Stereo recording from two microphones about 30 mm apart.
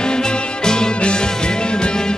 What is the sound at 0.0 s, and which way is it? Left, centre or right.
Music, left.